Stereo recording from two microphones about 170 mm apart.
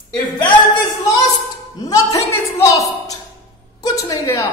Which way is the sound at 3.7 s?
25° left (ahead or behind).